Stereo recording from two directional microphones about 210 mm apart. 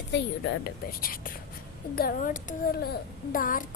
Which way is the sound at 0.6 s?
45° left (ahead or behind).